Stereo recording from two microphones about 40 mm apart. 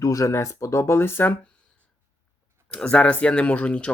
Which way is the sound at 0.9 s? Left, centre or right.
Left.